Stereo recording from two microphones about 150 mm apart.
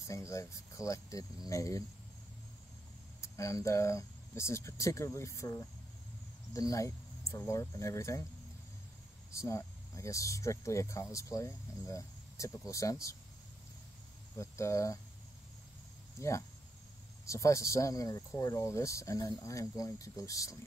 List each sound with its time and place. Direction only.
0.3 s speech: 20° left (ahead or behind)
3.2 s speech: 20° left (ahead or behind)
9.3 s speech: 20° left (ahead or behind)
14.4 s speech: 20° left (ahead or behind)
16.2 s speech: 20° left (ahead or behind)